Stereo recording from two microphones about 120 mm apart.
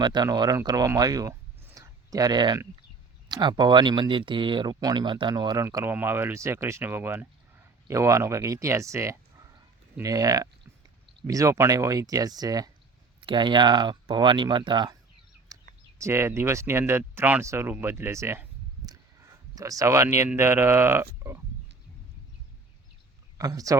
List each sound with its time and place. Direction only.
0.0 s speech: 35° right (ahead or behind)
1.6 s a sound: 25° right (ahead or behind)
3.2 s speech: 40° right (ahead or behind)
5.6 s speech: 20° right (ahead or behind); by 14.9 s 40° right (ahead or behind)
15.5 s a sound: 30° right (ahead or behind)
16.0 s speech: 20° right (ahead or behind)
17.4 s speech: 25° right (ahead or behind)
23.4 s speech: 30° right (ahead or behind)